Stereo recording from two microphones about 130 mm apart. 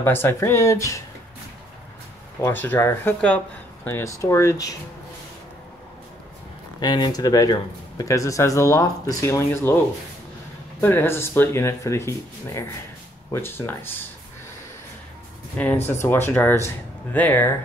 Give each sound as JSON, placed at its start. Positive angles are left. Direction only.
{"t": 0.0, "sound": "speech", "side_deg": 15}
{"t": 2.4, "sound": "speech", "side_deg": 15}
{"t": 6.8, "sound": "speech", "side_deg": 35}
{"t": 10.8, "sound": "speech", "side_deg": 15}
{"t": 15.5, "sound": "speech", "side_deg": 10}